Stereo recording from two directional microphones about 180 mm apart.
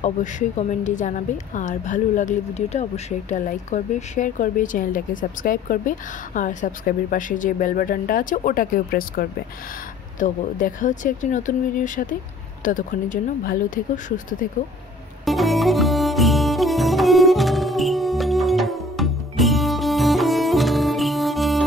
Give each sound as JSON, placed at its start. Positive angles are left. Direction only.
{"t": 0.0, "sound": "speech", "side_deg": 40}
{"t": 15.2, "sound": "music", "side_deg": 0}